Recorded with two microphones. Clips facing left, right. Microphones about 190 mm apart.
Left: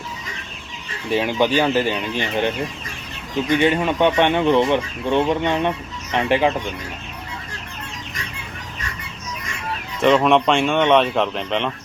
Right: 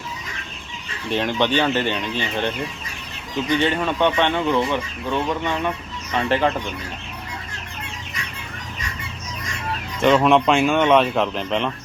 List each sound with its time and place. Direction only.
1.1 s speech: 10° left (ahead or behind)
3.5 s speech: 15° left (ahead or behind)
10.0 s speech: centre (ahead or behind)